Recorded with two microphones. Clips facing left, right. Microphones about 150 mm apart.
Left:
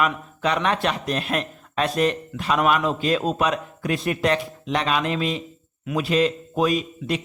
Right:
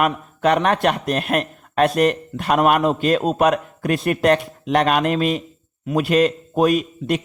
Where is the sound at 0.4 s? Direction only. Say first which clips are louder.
Right 5 dB; 50° right (ahead or behind).